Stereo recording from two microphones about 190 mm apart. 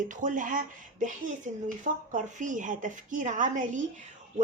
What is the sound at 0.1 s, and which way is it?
Speech, 45° right (ahead or behind).